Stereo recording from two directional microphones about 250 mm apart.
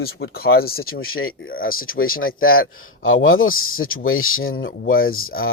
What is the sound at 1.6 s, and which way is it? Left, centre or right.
Speech, left.